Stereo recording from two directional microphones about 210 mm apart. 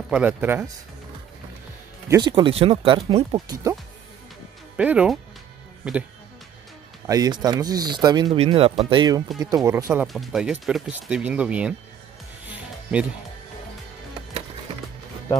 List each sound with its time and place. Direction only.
0.1 s speech: 5° right (ahead or behind)
2.0 s speech: 20° right (ahead or behind)
4.7 s speech: 5° right (ahead or behind)
7.1 s speech: 20° right (ahead or behind)
10.0 s speech: centre (ahead or behind)